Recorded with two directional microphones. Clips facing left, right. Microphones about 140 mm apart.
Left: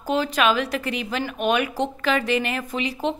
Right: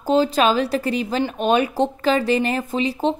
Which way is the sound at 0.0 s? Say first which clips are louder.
Right 4 dB; 30° right (ahead or behind).